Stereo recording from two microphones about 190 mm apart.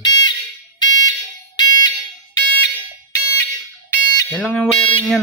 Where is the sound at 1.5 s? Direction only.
20° left (ahead or behind).